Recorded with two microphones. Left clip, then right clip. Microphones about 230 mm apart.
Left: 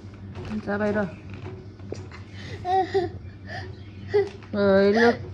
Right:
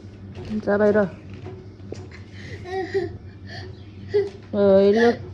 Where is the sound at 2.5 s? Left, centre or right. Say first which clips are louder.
Left 6 dB; centre.